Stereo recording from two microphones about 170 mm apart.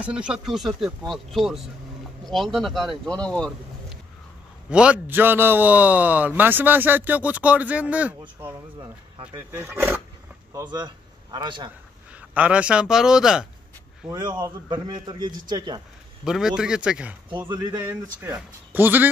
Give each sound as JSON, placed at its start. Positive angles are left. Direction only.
{"t": 0.0, "sound": "a man's voice", "side_deg": -5}
{"t": 9.2, "sound": "a man's voice", "side_deg": -15}
{"t": 12.1, "sound": "a man's voice", "side_deg": -10}
{"t": 14.0, "sound": "a man's voice", "side_deg": -25}
{"t": 16.3, "sound": "speech", "side_deg": -5}
{"t": 17.5, "sound": "a man's voice", "side_deg": -25}
{"t": 18.2, "sound": "a man's voice", "side_deg": -10}